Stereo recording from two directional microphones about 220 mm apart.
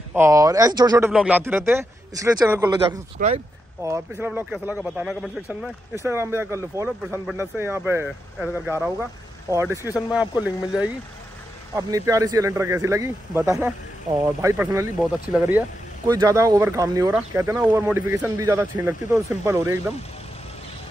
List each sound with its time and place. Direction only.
0.1 s speech: 15° right (ahead or behind)
3.2 s speech: 35° right (ahead or behind)
3.8 s speech: 15° right (ahead or behind)
5.9 s speech: 10° right (ahead or behind)